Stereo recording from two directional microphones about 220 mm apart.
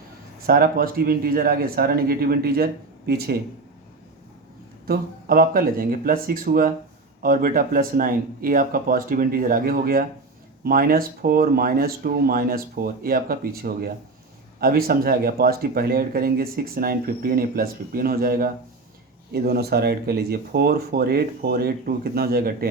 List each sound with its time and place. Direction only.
0.4 s speech: 40° right (ahead or behind)
4.9 s speech: 40° right (ahead or behind)